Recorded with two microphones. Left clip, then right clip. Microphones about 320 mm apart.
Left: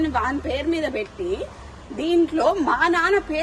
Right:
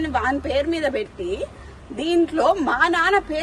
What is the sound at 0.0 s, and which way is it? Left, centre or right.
Speech, centre.